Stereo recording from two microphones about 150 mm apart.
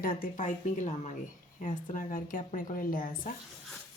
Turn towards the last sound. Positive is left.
turn(degrees=70)  # may be behind; listen again after turning